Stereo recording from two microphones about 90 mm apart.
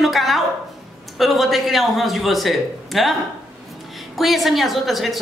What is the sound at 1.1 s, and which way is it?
A woman's voice, centre (ahead or behind).